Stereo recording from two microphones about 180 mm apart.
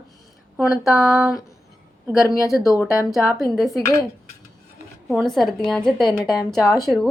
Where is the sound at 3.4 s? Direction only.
Centre (ahead or behind).